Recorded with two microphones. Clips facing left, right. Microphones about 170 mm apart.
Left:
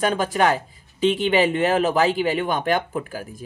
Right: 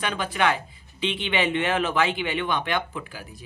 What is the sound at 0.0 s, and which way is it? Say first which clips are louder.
Speech: left 5 dB; 40° left (ahead or behind).